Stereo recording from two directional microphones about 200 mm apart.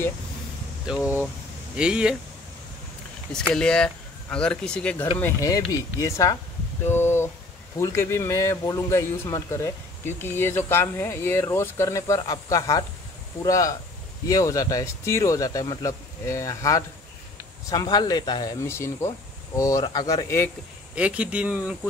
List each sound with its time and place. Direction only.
0.9 s speech: 5° right (ahead or behind)
3.3 s speech: 5° left (ahead or behind)
5.2 s a man's voice: 15° left (ahead or behind)
6.9 s a sound: 10° left (ahead or behind)
7.8 s a man's voice: 15° left (ahead or behind)
20.9 s speech: 5° right (ahead or behind)